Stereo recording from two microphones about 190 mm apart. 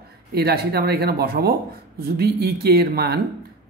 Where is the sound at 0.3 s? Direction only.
55° right (ahead or behind).